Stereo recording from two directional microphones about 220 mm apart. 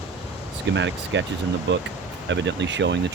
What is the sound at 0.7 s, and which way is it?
Speech, 55° right (ahead or behind).